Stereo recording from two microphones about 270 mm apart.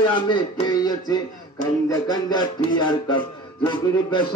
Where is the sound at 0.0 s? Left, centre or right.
Centre.